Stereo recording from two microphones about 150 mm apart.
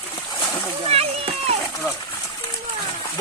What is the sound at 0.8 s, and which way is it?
Splash, 40° right (ahead or behind).